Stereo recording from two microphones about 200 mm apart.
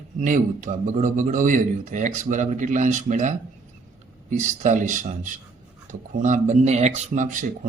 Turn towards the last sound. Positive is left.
turn(degrees=-35)  # may be behind; listen again after turning